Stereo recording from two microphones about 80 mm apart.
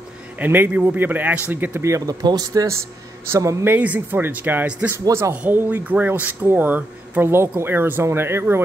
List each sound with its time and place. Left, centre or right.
0.4 s speech: right
1.8 s speech: right
3.3 s speech: right
3.7 s speech: centre